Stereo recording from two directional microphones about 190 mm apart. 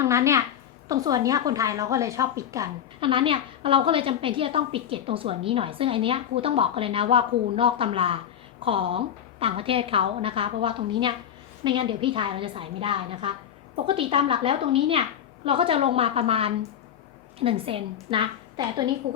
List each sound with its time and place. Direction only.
0.0 s a child's voice: 15° right (ahead or behind)